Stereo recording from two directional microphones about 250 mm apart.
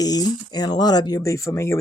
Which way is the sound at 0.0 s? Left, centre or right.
Centre.